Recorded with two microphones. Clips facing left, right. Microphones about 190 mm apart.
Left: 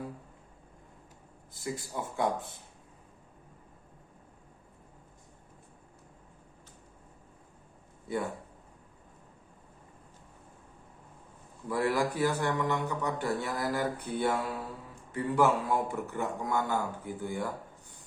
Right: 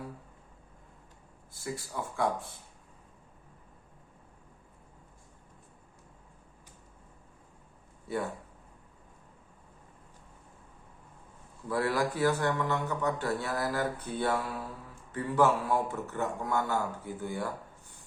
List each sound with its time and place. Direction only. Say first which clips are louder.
1.5 s speech: left 1 dB; 20° left (ahead or behind)
11.7 s mantra: left 1 dB; 15° left (ahead or behind)